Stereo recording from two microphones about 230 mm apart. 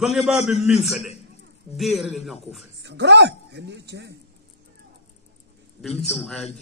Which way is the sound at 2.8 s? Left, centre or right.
Right.